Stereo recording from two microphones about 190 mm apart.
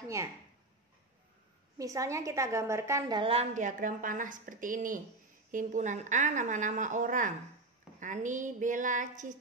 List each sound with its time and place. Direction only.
1.8 s a woman's voice: 15° right (ahead or behind); by 9.3 s 40° right (ahead or behind)